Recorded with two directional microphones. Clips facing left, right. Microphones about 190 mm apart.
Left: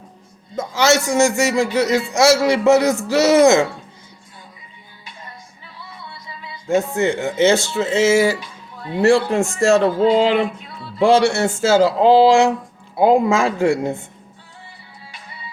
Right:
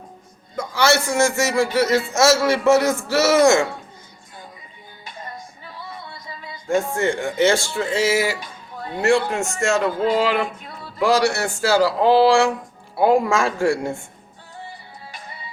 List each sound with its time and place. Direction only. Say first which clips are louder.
0.5 s a man's voice: left 2 dB; 20° left (ahead or behind)
5.0 s music: right 4 dB; 45° right (ahead or behind)
6.7 s speech: left 2 dB; 20° left (ahead or behind)
8.4 s music: right 2 dB; 45° right (ahead or behind)
9.0 s a man's voice: left 4 dB; 35° left (ahead or behind)
10.6 s music: left 2 dB; 45° right (ahead or behind)
11.0 s speech: left 4 dB; 25° left (ahead or behind)
15.1 s music: right 1 dB; 45° right (ahead or behind)